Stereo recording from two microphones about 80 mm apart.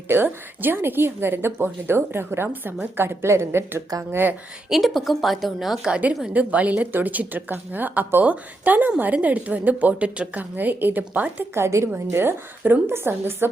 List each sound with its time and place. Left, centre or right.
0.1 s a woman's voice: right
4.7 s a woman's voice: centre
6.3 s speech: centre
11.5 s a woman's voice: right